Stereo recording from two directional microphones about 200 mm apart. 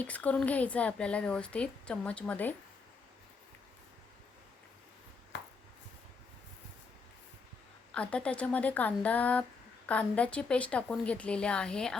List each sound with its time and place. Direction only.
0.0 s speech: 5° left (ahead or behind)
5.3 s chopping: 65° left (ahead or behind)
7.9 s a woman's voice: 5° left (ahead or behind)